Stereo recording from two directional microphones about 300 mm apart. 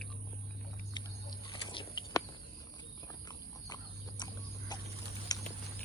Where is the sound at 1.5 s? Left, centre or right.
Centre.